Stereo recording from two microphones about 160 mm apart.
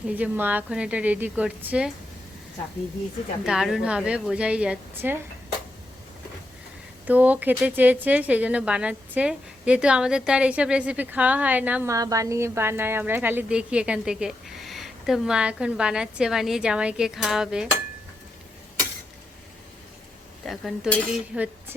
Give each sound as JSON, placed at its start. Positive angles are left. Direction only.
{"t": 0.1, "sound": "speech", "side_deg": -10}
{"t": 3.4, "sound": "speech", "side_deg": -5}
{"t": 7.1, "sound": "speech", "side_deg": -10}
{"t": 20.4, "sound": "speech", "side_deg": 0}